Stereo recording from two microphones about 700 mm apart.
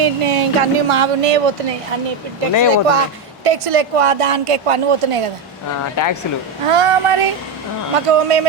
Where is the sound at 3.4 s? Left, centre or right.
Right.